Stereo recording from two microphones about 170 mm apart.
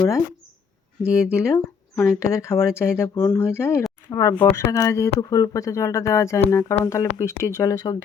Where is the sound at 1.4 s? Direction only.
15° left (ahead or behind).